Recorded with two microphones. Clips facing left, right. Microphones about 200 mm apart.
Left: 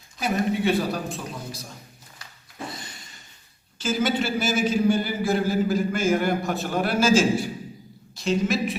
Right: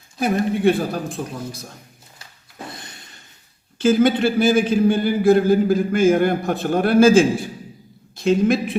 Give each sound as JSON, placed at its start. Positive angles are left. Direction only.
{"t": 0.2, "sound": "a woman's voice", "side_deg": -55}
{"t": 3.8, "sound": "a man's voice", "side_deg": -55}